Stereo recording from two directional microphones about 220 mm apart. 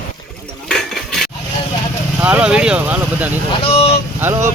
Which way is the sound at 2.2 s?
5° right (ahead or behind).